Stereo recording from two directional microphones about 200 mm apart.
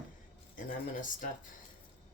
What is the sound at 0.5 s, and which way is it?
Speech, 40° left (ahead or behind).